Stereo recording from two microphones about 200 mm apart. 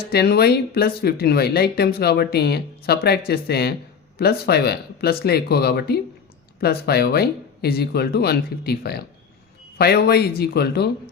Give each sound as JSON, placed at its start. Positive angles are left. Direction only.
{"t": 0.1, "sound": "speech", "side_deg": 50}